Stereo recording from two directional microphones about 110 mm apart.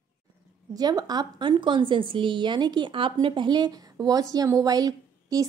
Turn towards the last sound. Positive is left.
turn(degrees=-35)  # may be behind; listen again after turning